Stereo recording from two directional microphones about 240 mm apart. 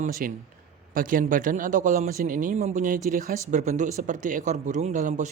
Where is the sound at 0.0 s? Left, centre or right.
Right.